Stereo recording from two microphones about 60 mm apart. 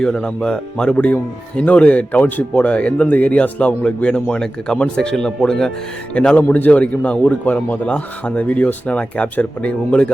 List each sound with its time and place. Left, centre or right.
0.0 s a man's voice: centre
0.9 s a man's voice: left
6.1 s a man's voice: left